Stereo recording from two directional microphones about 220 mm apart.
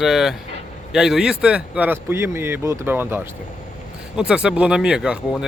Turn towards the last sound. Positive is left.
turn(degrees=-5)  # may be behind; listen again after turning